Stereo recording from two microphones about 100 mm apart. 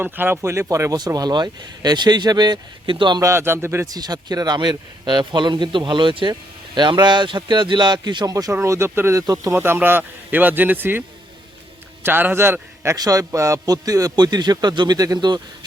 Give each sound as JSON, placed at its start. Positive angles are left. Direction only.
{"t": 0.0, "sound": "speech", "side_deg": -20}
{"t": 3.2, "sound": "speech", "side_deg": -25}
{"t": 3.8, "sound": "speech", "side_deg": -40}
{"t": 8.6, "sound": "speech", "side_deg": -30}
{"t": 9.2, "sound": "a man's voice", "side_deg": -40}
{"t": 9.6, "sound": "speech", "side_deg": -20}
{"t": 12.0, "sound": "a man's voice", "side_deg": -20}